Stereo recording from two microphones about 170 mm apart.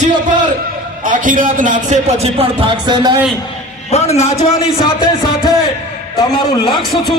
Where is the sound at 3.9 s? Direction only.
40° left (ahead or behind).